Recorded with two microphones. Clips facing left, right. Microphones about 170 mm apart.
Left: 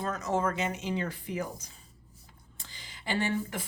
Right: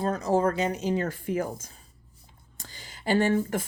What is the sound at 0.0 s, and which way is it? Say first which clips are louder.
Speech: right 6 dB; 35° right (ahead or behind).